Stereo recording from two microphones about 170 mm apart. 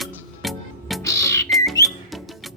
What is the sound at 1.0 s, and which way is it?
Music, 20° left (ahead or behind).